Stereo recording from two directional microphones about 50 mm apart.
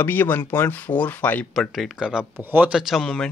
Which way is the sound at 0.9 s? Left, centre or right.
Left.